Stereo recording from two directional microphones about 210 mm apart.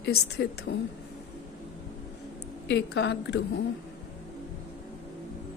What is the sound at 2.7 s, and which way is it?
Speech, 55° left (ahead or behind).